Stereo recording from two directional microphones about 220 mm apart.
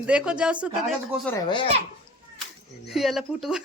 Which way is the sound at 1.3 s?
20° left (ahead or behind).